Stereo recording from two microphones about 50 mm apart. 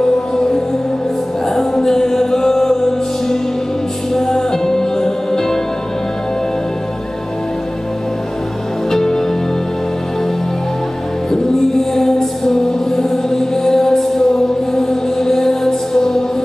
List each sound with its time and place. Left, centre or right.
1.5 s music: centre
4.1 s music: centre
8.9 s music: centre
11.9 s music: centre